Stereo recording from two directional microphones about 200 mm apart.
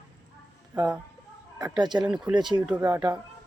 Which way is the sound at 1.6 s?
20° right (ahead or behind).